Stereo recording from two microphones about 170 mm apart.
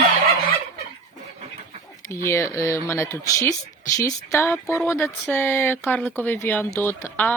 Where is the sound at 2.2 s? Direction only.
15° left (ahead or behind).